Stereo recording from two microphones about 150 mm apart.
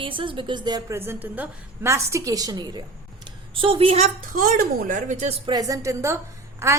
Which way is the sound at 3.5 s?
35° right (ahead or behind).